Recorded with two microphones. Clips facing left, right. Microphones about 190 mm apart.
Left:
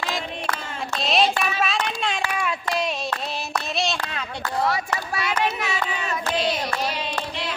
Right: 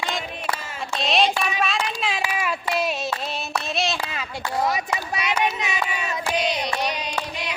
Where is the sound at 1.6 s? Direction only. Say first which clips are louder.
Even; centre (ahead or behind).